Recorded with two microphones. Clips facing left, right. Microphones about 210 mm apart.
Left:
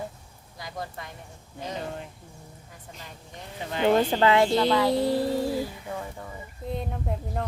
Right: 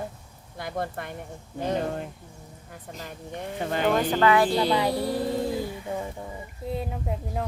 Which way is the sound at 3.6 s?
50° right (ahead or behind).